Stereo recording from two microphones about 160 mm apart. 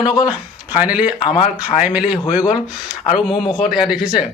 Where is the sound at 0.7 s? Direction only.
10° right (ahead or behind).